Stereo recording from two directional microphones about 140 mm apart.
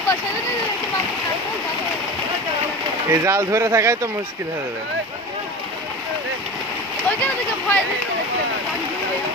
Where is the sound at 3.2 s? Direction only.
20° right (ahead or behind).